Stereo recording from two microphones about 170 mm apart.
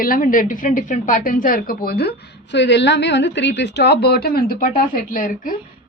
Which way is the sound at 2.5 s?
90° left.